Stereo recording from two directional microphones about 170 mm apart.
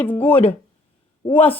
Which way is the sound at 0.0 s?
10° left (ahead or behind).